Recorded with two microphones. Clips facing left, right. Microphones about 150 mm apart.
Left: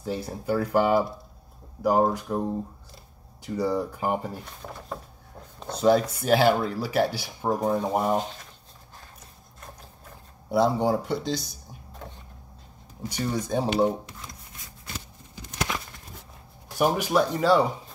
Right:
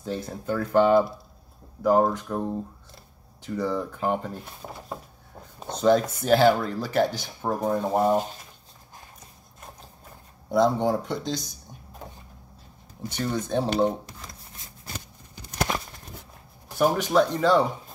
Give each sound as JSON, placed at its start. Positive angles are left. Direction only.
{"t": 0.0, "sound": "speech", "side_deg": 10}
{"t": 3.4, "sound": "speech", "side_deg": 10}
{"t": 4.5, "sound": "speech", "side_deg": -10}
{"t": 5.7, "sound": "speech", "side_deg": 5}
{"t": 10.5, "sound": "speech", "side_deg": 5}
{"t": 13.1, "sound": "speech", "side_deg": 10}
{"t": 15.5, "sound": "a sound", "side_deg": -45}
{"t": 16.7, "sound": "speech", "side_deg": 10}